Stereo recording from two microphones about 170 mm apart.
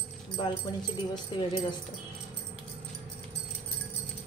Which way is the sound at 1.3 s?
30° left (ahead or behind).